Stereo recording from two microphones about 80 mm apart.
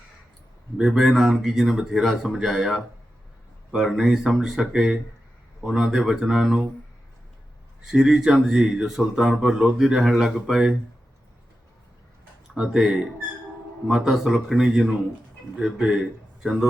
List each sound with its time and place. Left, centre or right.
0.8 s speech: centre
7.9 s speech: centre
12.5 s speech: centre